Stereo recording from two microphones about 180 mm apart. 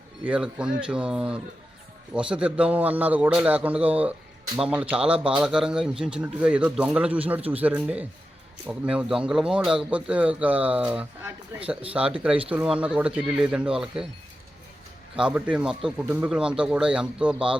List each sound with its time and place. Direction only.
0.3 s speech: 5° right (ahead or behind)
15.2 s speech: 5° right (ahead or behind)